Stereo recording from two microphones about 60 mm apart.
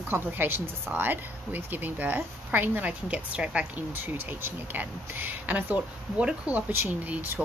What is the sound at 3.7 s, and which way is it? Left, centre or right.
Speech, right.